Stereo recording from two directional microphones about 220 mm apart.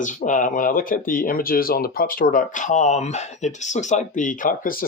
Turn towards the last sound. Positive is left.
turn(degrees=40)  # may be behind; listen again after turning